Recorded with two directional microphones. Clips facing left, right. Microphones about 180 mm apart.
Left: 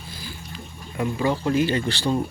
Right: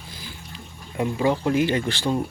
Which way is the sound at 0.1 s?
20° right (ahead or behind).